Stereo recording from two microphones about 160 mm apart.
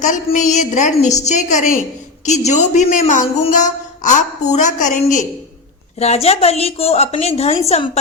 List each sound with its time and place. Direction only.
0.0 s a woman's voice: 50° left (ahead or behind)
6.0 s a woman's voice: 40° left (ahead or behind)